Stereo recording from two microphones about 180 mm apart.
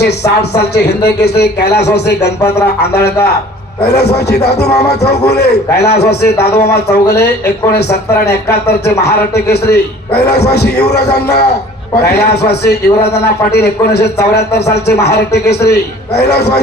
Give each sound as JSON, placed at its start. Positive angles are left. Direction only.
{"t": 0.5, "sound": "speech", "side_deg": 65}